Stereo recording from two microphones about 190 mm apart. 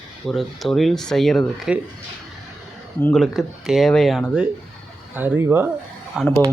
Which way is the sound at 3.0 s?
Centre (ahead or behind).